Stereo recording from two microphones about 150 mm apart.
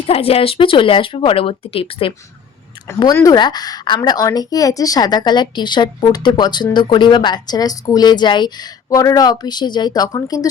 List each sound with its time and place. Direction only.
0.1 s speech: 40° left (ahead or behind)
2.8 s speech: 20° left (ahead or behind)